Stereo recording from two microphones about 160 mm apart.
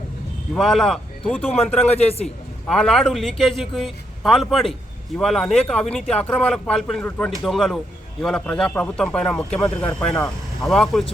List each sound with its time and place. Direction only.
0.5 s speech: centre (ahead or behind)
2.0 s a man's voice: 40° left (ahead or behind)
2.2 s a man's voice: 5° left (ahead or behind)